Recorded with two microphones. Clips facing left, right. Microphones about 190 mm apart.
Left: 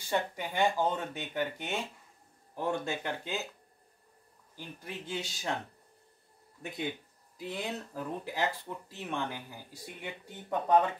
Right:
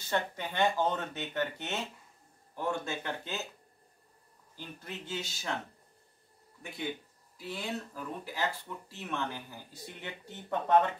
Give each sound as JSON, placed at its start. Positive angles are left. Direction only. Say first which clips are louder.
{"t": 0.1, "sound": "speech", "louder": "left 1 dB", "side_deg": 15}
{"t": 4.6, "sound": "speech", "louder": "left 1 dB", "side_deg": 15}
{"t": 7.3, "sound": "speech", "louder": "left 1 dB", "side_deg": 20}